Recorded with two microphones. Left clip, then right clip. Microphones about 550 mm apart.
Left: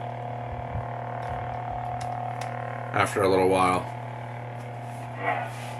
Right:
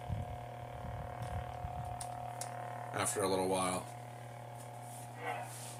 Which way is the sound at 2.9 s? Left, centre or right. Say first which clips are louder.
Left 13 dB; right.